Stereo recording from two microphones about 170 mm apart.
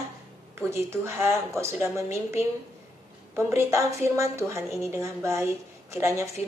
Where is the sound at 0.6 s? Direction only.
15° right (ahead or behind).